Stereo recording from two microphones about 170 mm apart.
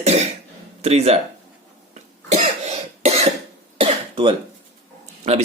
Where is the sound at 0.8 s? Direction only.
40° right (ahead or behind).